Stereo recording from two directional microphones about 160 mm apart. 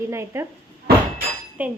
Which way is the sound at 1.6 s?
10° right (ahead or behind).